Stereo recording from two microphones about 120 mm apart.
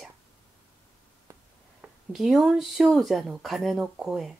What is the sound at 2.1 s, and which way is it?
Speech, centre (ahead or behind).